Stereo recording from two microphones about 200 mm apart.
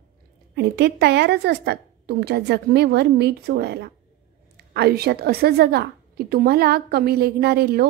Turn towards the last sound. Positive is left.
turn(degrees=-50)  # may be behind; listen again after turning